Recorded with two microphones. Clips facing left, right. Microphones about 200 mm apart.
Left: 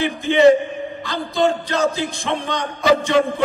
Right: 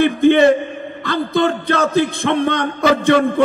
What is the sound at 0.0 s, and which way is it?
A man's voice, 55° right (ahead or behind).